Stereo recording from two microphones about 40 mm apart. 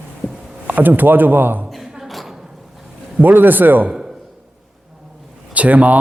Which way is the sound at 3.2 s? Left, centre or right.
Right.